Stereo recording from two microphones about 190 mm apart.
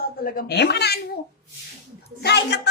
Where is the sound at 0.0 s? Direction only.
50° left (ahead or behind).